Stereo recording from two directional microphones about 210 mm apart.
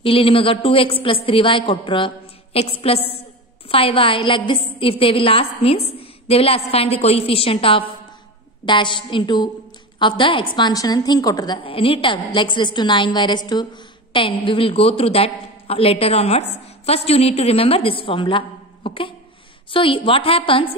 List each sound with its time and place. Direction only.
0.0 s a woman's voice: 25° left (ahead or behind)